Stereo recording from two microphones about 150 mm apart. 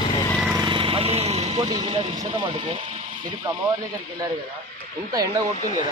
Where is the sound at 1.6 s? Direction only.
30° right (ahead or behind).